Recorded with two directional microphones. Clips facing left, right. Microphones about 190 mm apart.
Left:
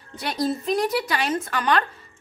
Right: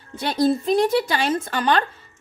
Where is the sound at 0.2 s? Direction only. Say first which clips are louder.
Right 5 dB; 30° right (ahead or behind).